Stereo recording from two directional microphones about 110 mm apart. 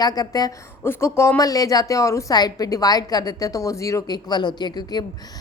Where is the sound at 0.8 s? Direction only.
20° left (ahead or behind).